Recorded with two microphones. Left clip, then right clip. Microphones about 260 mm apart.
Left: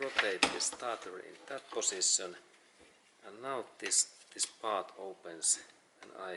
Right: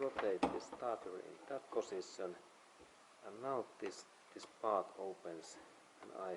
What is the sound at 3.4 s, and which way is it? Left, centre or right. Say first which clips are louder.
Speech: left 4 dB; centre.